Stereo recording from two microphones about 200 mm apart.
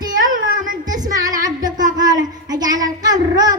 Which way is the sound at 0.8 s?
20° right (ahead or behind).